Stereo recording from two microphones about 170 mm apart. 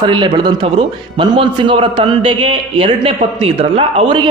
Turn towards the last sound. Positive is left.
turn(degrees=-30)  # may be behind; listen again after turning